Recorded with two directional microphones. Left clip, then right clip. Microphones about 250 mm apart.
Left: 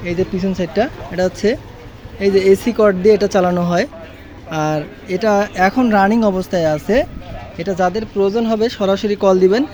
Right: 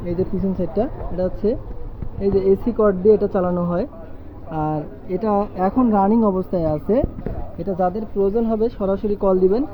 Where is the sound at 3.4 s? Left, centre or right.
Left.